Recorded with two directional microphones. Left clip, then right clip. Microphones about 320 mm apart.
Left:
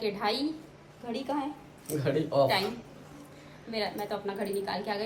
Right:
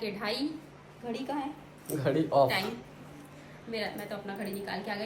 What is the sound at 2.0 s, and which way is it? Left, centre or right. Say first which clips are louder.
Speech: right 1 dB; centre.